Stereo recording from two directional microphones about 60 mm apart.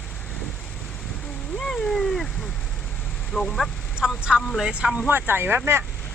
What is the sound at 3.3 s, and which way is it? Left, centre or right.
Speech, centre.